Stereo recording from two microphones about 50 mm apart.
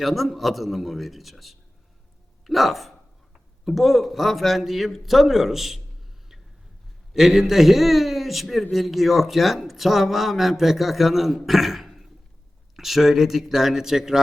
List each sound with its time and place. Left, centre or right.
0.0 s speech: centre
7.1 s speech: centre